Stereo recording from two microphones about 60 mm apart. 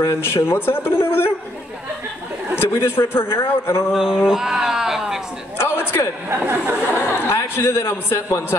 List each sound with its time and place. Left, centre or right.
0.0 s a man's voice: left
2.6 s a man's voice: left
3.9 s speech: centre
5.6 s a sound: left
6.2 s speech: right
7.2 s a man's voice: left